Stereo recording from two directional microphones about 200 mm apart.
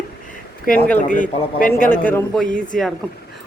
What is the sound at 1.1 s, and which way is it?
Speech, 40° left (ahead or behind).